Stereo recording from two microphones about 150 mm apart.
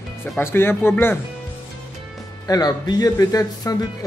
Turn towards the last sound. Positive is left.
turn(degrees=25)  # may be behind; listen again after turning